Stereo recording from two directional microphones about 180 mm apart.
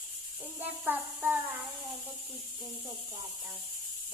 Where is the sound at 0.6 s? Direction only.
10° right (ahead or behind).